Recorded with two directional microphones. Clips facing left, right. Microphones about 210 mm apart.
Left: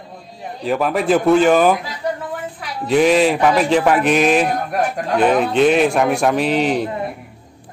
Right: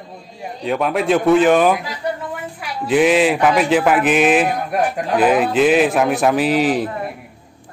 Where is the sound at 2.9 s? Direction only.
Centre (ahead or behind).